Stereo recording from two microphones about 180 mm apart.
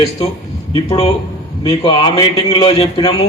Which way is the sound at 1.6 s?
25° left (ahead or behind).